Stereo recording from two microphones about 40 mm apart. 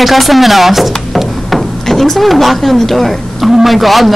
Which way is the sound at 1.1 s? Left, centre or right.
Centre.